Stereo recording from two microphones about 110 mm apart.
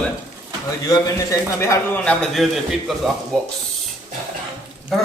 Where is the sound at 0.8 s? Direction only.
30° left (ahead or behind).